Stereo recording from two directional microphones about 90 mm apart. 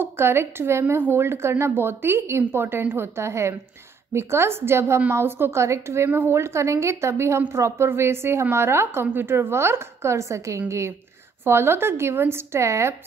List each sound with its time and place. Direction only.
0.0 s a woman's voice: 25° right (ahead or behind)